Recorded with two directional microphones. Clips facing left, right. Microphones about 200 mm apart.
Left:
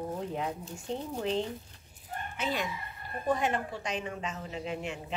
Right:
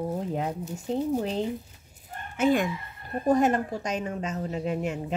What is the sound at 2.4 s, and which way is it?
A woman's voice, 50° right (ahead or behind).